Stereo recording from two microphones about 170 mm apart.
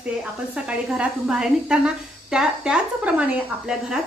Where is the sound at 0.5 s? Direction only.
5° right (ahead or behind).